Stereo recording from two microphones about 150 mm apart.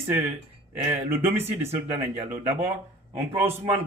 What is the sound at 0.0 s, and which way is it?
Speech, 15° right (ahead or behind).